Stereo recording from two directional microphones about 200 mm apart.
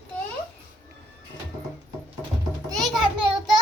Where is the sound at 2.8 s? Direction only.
Centre (ahead or behind).